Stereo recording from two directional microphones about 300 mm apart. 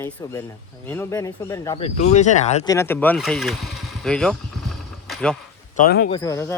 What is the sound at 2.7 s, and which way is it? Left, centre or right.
Speech, centre.